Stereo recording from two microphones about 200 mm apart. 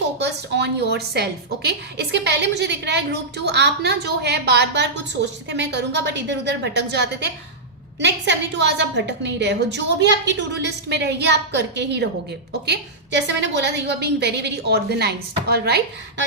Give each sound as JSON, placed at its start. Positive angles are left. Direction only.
{"t": 0.2, "sound": "a woman's voice", "side_deg": -55}